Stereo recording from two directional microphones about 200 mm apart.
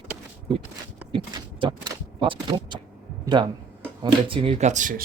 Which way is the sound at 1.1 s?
25° right (ahead or behind).